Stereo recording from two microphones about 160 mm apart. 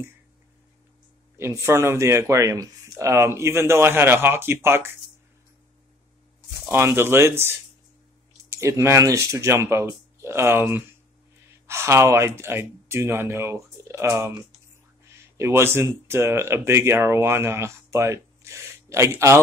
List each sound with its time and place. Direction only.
1.4 s speech: 15° right (ahead or behind)
6.6 s speech: 15° right (ahead or behind)
15.3 s speech: 15° right (ahead or behind)